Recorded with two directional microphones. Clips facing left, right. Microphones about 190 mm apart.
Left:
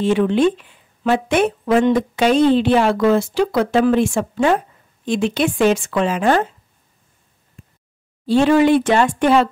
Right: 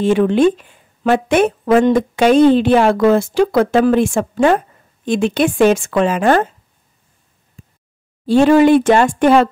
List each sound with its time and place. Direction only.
0.0 s a woman's voice: 50° right (ahead or behind)
8.3 s a woman's voice: 45° right (ahead or behind)